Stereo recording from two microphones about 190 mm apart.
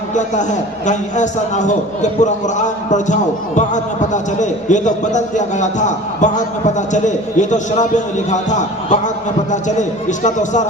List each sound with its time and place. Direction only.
0.1 s a man's voice: 40° left (ahead or behind)